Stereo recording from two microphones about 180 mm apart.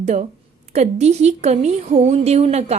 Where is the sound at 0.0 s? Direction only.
40° right (ahead or behind).